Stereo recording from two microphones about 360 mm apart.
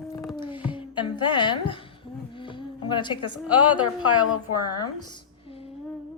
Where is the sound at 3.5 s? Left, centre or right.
Centre.